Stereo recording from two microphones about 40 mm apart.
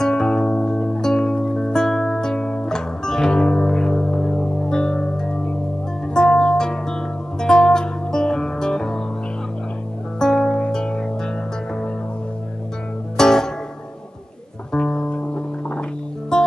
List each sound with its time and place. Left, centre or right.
0.0 s music: centre
10.1 s music: centre
10.6 s music: left
13.2 s music: centre
14.7 s music: left